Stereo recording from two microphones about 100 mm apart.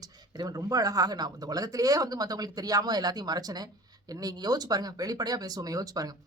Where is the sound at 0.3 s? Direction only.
40° right (ahead or behind).